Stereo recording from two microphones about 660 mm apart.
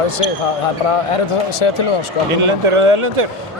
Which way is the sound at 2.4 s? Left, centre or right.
Right.